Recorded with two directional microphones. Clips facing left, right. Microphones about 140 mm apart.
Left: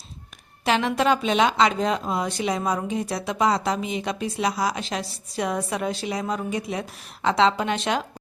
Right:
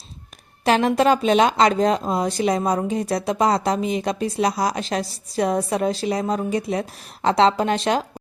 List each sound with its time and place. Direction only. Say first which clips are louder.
0.6 s speech: right 4 dB; 40° right (ahead or behind)